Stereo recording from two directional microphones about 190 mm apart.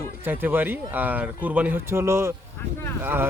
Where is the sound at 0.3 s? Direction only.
10° right (ahead or behind).